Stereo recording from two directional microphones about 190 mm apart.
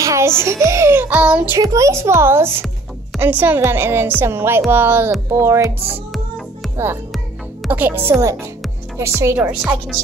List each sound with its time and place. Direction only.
0.0 s music: 15° right (ahead or behind)
0.4 s a child's voice: 15° right (ahead or behind)
6.1 s music: centre (ahead or behind)
7.6 s a child's voice: 10° right (ahead or behind)